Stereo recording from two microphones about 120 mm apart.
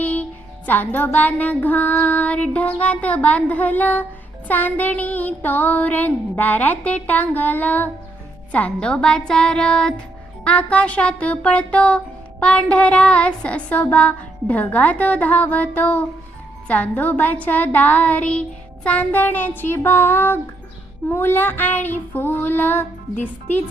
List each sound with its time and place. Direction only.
0.0 s speech: 15° left (ahead or behind)